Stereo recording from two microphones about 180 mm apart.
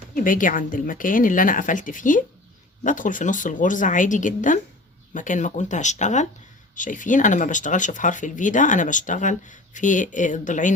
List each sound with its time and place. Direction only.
0.1 s speech: 50° left (ahead or behind)